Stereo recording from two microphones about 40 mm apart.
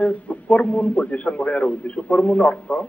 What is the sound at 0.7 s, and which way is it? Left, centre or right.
A man's voice, left.